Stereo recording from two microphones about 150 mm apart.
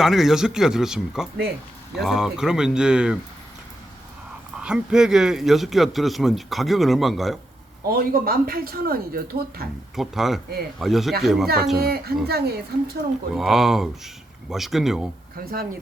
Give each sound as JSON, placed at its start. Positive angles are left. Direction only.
{"t": 0.0, "sound": "speech", "side_deg": 0}
{"t": 4.5, "sound": "speech", "side_deg": -5}
{"t": 7.9, "sound": "speech", "side_deg": -85}
{"t": 9.9, "sound": "speech", "side_deg": 0}
{"t": 11.8, "sound": "a woman's voice", "side_deg": -90}
{"t": 13.3, "sound": "speech", "side_deg": 0}